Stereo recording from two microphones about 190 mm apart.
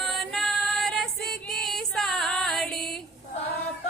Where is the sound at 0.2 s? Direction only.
Centre (ahead or behind).